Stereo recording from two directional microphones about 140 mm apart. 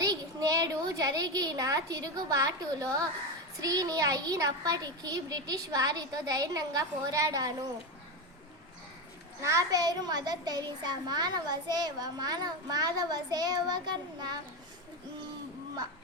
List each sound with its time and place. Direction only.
0.0 s a child's voice: 25° right (ahead or behind)
9.4 s a child's voice: 20° right (ahead or behind)